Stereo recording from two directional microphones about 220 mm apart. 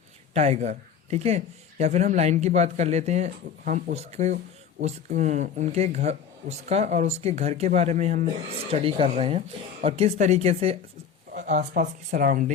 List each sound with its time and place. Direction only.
0.3 s speech: 30° right (ahead or behind)